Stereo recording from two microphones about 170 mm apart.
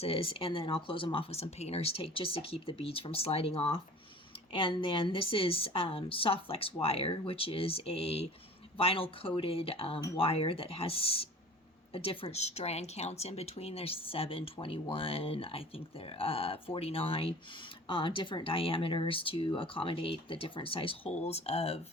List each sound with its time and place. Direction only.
0.0 s speech: 35° left (ahead or behind)